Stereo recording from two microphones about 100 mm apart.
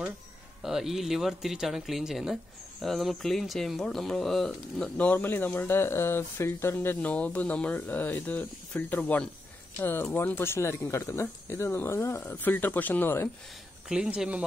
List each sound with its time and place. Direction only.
0.6 s speech: 5° right (ahead or behind); by 13.3 s 20° left (ahead or behind)
13.8 s speech: 5° right (ahead or behind)